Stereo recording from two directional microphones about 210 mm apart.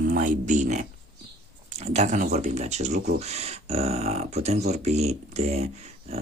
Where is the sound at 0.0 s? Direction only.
40° right (ahead or behind).